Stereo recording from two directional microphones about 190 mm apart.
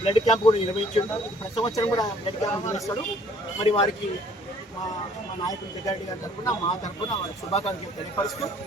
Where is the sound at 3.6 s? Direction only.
30° left (ahead or behind).